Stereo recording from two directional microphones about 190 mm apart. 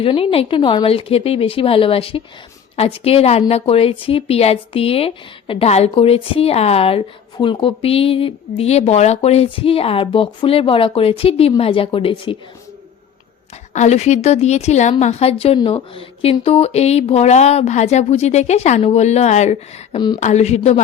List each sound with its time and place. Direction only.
0.0 s a woman's voice: 30° left (ahead or behind)
13.7 s a woman's voice: 35° left (ahead or behind)